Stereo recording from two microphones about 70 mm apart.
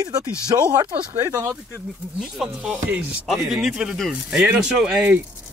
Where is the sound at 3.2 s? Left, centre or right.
Centre.